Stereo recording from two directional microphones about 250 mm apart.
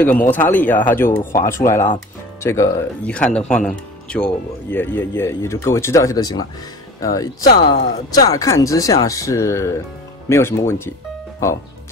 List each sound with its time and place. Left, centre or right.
0.0 s speech: centre
7.4 s speech: left
8.1 s speech: centre